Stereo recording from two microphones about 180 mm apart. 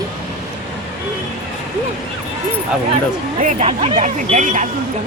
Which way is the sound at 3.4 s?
40° right (ahead or behind).